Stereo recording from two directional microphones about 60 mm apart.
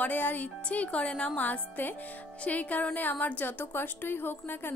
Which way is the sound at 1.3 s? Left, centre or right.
Left.